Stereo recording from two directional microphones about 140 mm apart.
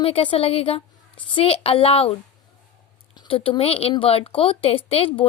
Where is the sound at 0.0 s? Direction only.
40° left (ahead or behind).